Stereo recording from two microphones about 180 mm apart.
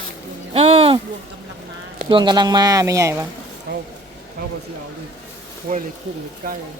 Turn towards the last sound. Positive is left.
turn(degrees=-50)  # may be behind; listen again after turning